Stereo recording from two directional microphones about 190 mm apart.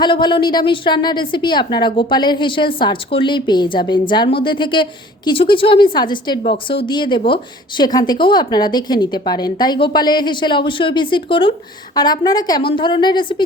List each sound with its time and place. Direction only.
0.0 s a woman's voice: 25° left (ahead or behind)